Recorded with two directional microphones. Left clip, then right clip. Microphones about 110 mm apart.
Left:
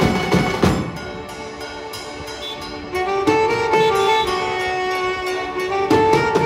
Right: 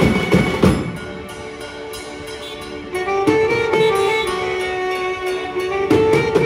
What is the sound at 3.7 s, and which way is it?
Music, 30° left (ahead or behind).